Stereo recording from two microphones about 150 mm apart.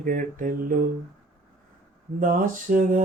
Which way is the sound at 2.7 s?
65° right (ahead or behind).